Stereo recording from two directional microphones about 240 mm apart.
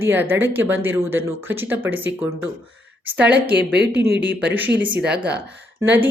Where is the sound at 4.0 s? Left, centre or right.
Right.